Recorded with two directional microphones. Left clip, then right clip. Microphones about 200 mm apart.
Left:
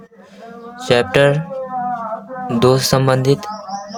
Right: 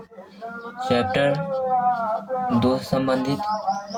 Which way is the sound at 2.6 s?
50° left (ahead or behind).